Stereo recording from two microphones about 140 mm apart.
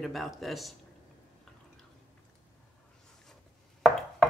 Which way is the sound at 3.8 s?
5° left (ahead or behind).